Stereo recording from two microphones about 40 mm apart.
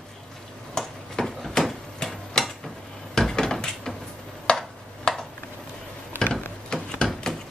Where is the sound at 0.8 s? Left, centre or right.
Centre.